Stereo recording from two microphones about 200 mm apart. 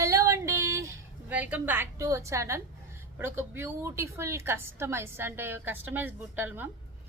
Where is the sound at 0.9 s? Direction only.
10° right (ahead or behind).